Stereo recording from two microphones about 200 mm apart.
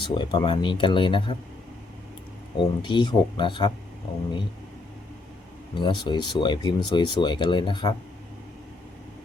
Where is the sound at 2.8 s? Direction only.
25° left (ahead or behind).